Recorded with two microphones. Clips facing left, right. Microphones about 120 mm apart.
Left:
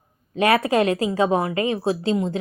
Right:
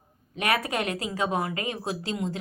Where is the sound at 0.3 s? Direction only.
30° left (ahead or behind).